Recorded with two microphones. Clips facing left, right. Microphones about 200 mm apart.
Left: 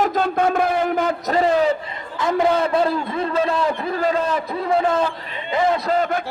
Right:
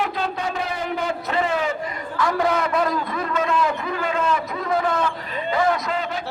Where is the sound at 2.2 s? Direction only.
20° left (ahead or behind).